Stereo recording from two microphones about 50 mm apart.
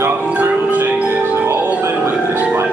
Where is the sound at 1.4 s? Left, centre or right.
Right.